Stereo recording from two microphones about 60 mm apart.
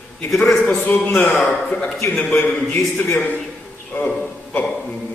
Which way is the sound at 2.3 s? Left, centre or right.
Left.